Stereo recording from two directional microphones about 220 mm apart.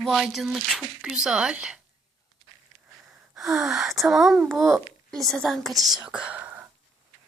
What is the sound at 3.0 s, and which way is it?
Speech, centre (ahead or behind).